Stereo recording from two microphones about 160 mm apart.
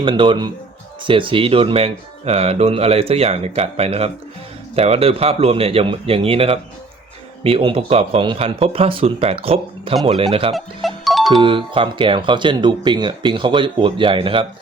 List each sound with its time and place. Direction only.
0.0 s speech: 30° right (ahead or behind)
10.5 s music: centre (ahead or behind)
11.3 s speech: 30° right (ahead or behind)